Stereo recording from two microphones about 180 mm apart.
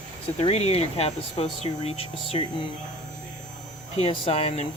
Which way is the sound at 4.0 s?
35° left (ahead or behind).